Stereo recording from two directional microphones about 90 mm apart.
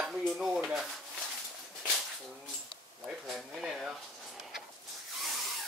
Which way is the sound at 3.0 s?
5° right (ahead or behind).